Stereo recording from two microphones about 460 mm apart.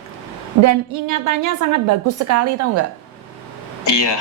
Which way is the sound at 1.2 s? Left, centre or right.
Right.